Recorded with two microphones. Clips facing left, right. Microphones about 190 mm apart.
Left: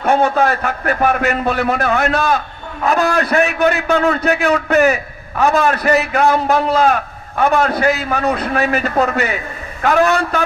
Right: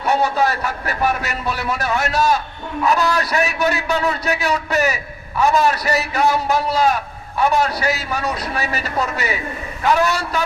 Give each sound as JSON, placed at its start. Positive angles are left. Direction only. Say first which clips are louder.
{"t": 0.0, "sound": "a man's voice", "louder": "left 4 dB", "side_deg": 50}